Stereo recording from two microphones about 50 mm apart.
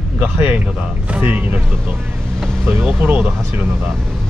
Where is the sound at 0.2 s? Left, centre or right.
Right.